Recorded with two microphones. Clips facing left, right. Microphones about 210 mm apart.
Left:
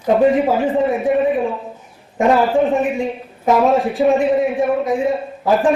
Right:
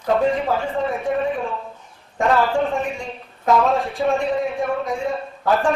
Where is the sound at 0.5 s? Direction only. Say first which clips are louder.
Left 6 dB; 15° left (ahead or behind).